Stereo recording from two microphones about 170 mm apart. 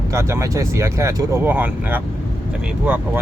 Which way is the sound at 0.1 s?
15° right (ahead or behind).